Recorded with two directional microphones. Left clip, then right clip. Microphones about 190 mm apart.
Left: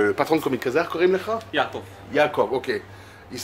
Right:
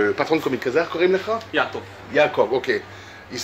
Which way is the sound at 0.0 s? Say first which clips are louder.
Right 1 dB; 15° left (ahead or behind).